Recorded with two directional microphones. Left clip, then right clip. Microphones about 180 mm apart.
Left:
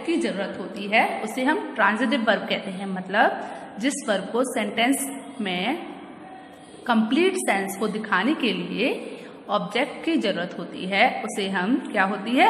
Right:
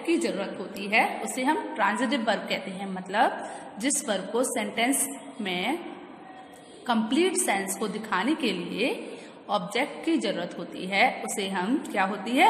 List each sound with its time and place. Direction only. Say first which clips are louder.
0.0 s a woman's voice: left 2 dB; 20° right (ahead or behind)
6.9 s a woman's voice: left 4 dB; 15° right (ahead or behind)
9.5 s a woman's voice: left 3 dB; 15° right (ahead or behind)